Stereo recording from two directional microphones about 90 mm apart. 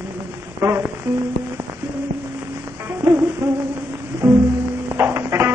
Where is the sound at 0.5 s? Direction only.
25° right (ahead or behind).